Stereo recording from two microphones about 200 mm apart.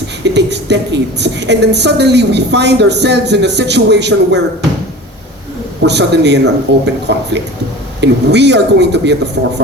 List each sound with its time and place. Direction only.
0.3 s a woman's voice: 60° right (ahead or behind)
5.8 s a woman's voice: 60° right (ahead or behind)